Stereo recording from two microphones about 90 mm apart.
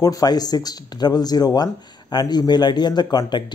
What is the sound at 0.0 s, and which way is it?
Speech, 45° left (ahead or behind).